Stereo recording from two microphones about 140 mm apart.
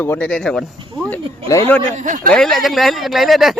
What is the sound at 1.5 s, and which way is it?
Speech, 25° left (ahead or behind).